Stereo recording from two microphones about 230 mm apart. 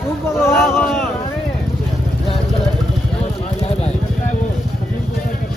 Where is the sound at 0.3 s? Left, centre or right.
Centre.